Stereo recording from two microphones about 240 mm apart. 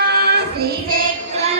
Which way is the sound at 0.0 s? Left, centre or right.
Right.